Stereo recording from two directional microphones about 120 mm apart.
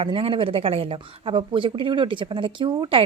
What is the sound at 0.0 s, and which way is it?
Speech, 50° right (ahead or behind).